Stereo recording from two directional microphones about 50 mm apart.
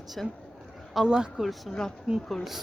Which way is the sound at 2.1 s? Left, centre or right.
Centre.